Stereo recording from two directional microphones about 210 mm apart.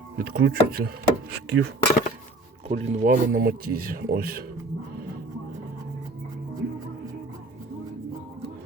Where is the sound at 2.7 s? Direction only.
40° right (ahead or behind).